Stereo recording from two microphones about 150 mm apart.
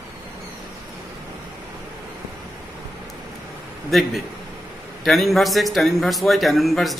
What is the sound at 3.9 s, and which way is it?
A man's voice, centre (ahead or behind).